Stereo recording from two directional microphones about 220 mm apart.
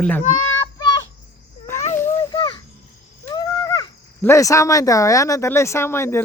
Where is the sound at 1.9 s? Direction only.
10° left (ahead or behind).